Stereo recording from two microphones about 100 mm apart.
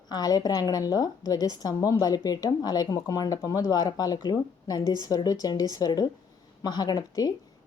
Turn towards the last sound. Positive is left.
turn(degrees=40)  # may be behind; listen again after turning